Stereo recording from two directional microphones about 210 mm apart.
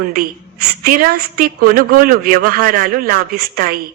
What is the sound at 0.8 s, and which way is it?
A woman's voice, 45° right (ahead or behind).